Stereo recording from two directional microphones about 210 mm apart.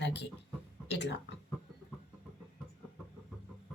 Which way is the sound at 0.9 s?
55° left (ahead or behind).